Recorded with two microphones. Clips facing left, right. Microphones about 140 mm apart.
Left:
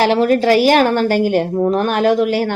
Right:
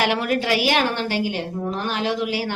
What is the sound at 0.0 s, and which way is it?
A woman's voice, 35° left (ahead or behind).